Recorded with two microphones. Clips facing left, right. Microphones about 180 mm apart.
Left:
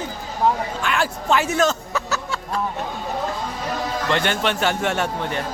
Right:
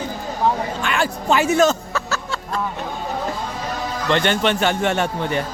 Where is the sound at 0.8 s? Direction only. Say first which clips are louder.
Right 1 dB; centre (ahead or behind).